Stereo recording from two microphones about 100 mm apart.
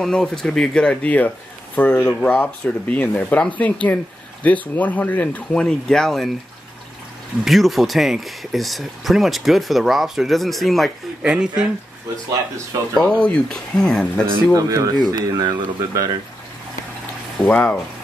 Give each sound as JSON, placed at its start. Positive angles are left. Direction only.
{"t": 0.0, "sound": "speech", "side_deg": 5}
{"t": 7.4, "sound": "speech", "side_deg": 0}
{"t": 11.2, "sound": "speech", "side_deg": -10}
{"t": 13.0, "sound": "speech", "side_deg": 10}
{"t": 14.5, "sound": "speech", "side_deg": -35}
{"t": 15.0, "sound": "speech", "side_deg": -45}
{"t": 17.4, "sound": "speech", "side_deg": 10}